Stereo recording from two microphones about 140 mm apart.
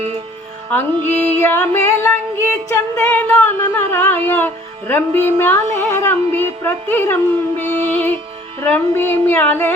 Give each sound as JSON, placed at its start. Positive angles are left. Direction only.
{"t": 0.7, "sound": "female singing", "side_deg": 15}
{"t": 7.6, "sound": "music", "side_deg": 15}
{"t": 8.7, "sound": "female singing", "side_deg": 15}